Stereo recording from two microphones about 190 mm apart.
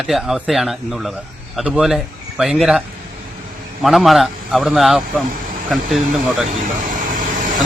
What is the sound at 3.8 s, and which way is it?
A man's voice, centre (ahead or behind).